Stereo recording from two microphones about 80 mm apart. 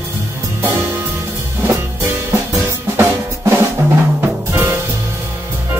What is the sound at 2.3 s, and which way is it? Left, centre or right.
Drum kit, right.